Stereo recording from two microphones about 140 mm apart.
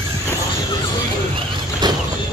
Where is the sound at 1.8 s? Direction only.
30° right (ahead or behind).